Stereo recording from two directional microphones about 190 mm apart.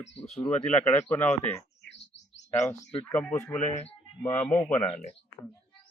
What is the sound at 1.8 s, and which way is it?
Bird, 70° left (ahead or behind).